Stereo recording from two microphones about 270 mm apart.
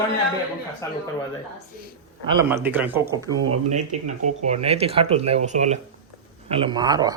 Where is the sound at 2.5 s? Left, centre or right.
Centre.